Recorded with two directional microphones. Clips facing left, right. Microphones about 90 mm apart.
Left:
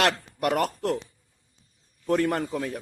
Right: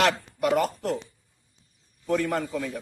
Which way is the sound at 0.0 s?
65° left (ahead or behind).